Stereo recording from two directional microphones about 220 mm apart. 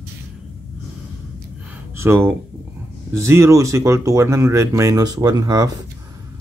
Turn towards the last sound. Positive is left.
turn(degrees=-15)  # may be behind; listen again after turning